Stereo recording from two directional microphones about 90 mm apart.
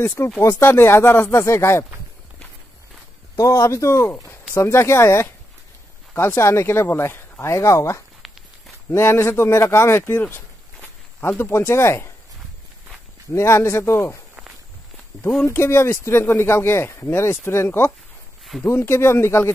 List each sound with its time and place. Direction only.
0.4 s speech: 30° left (ahead or behind)
3.3 s speech: 35° left (ahead or behind)
13.3 s speech: 30° left (ahead or behind)
15.4 s speech: 30° left (ahead or behind)